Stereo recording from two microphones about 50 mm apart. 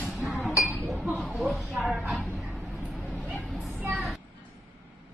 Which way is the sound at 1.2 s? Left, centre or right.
Centre.